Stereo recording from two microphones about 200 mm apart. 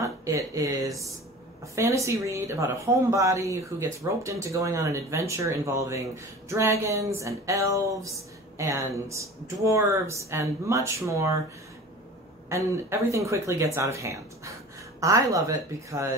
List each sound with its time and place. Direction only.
0.0 s speech: 15° right (ahead or behind)
12.4 s speech: 15° right (ahead or behind)